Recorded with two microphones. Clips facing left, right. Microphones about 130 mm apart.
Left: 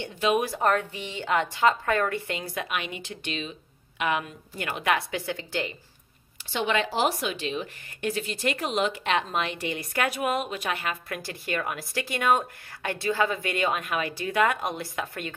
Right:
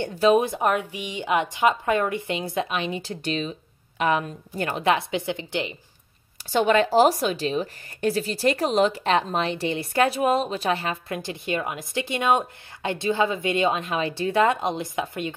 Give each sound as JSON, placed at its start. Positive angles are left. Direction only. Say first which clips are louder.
{"t": 0.0, "sound": "speech", "louder": "right 6 dB", "side_deg": -40}
{"t": 0.6, "sound": "speech", "louder": "right 1 dB", "side_deg": -10}
{"t": 6.5, "sound": "speech", "louder": "right 8 dB", "side_deg": -45}